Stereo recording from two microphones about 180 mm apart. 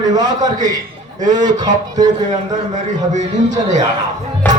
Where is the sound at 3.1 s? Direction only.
40° right (ahead or behind).